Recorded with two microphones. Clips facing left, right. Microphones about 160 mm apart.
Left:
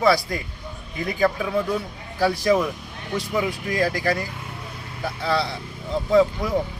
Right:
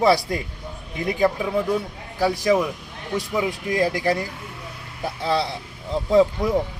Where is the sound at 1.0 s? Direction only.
15° right (ahead or behind).